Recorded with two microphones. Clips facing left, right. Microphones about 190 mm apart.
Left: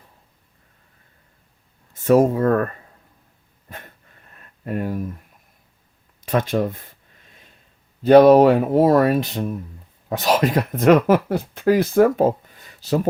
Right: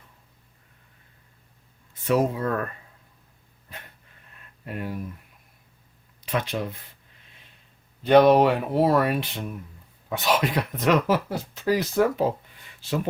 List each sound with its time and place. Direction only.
1.9 s speech: 45° left (ahead or behind)
3.7 s dog: 45° left (ahead or behind)
4.4 s a sound: 45° left (ahead or behind)
6.2 s speech: 45° left (ahead or behind)
8.0 s speech: 40° left (ahead or behind)